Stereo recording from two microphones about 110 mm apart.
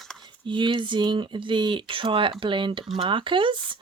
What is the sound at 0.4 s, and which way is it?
Speech, 45° right (ahead or behind).